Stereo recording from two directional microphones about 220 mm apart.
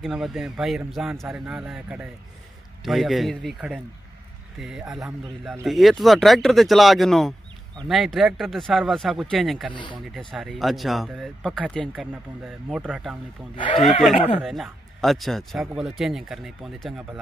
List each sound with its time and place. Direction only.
0.0 s speech: centre (ahead or behind)
13.6 s speech: 30° left (ahead or behind)
14.4 s speech: centre (ahead or behind)